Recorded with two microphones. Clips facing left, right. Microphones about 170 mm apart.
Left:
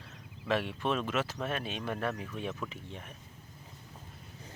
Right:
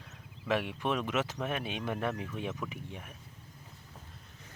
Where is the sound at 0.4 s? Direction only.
15° right (ahead or behind).